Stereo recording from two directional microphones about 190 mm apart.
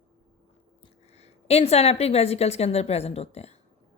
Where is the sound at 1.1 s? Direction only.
35° left (ahead or behind).